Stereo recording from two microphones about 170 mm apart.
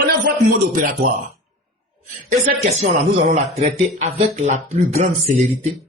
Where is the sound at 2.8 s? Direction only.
40° right (ahead or behind).